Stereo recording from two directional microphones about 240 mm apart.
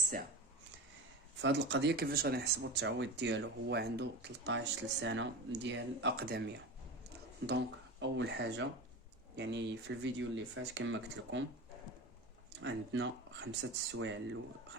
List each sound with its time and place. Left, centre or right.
1.4 s speech: right
7.4 s speech: right
12.5 s speech: right